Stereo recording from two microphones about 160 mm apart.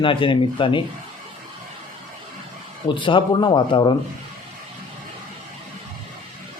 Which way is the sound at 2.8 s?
30° left (ahead or behind).